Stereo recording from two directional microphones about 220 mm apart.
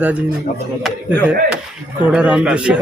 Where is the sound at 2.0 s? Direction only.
5° right (ahead or behind).